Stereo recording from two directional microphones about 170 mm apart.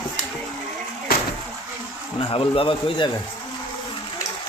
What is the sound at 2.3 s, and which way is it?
Speech, 35° left (ahead or behind).